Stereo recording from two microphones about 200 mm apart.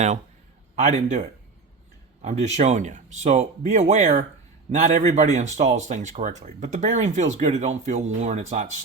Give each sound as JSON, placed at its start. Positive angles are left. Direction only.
{"t": 0.8, "sound": "speech", "side_deg": -35}